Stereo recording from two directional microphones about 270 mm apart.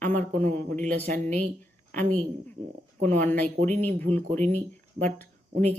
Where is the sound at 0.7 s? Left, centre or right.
Right.